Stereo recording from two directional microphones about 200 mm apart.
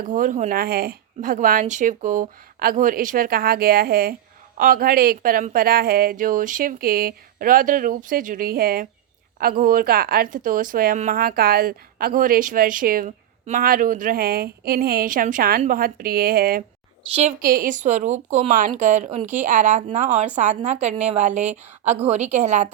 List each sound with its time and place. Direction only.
0.0 s a woman's voice: 40° right (ahead or behind)